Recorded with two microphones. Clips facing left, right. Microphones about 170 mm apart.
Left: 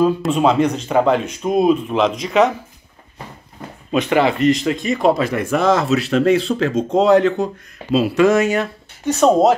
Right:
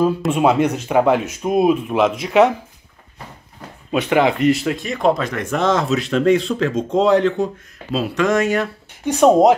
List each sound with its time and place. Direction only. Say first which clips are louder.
0.2 s speech: even; 10° right (ahead or behind)
3.9 s speech: even; 10° right (ahead or behind); by 6.0 s 5° left (ahead or behind)
6.5 s speech: left 1 dB; 40° left (ahead or behind)
7.2 s speech: left 2 dB; 5° left (ahead or behind)
9.0 s speech: right 1 dB; 15° right (ahead or behind)